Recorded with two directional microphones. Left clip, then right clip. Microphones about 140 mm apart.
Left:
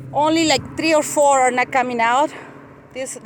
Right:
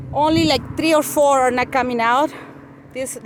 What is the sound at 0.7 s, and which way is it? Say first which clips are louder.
Speech: right 1 dB; 25° right (ahead or behind).